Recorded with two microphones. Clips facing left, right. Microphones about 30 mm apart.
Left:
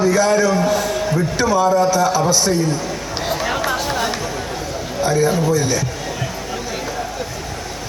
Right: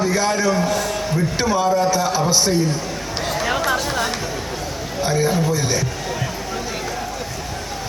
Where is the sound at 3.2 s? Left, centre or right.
Centre.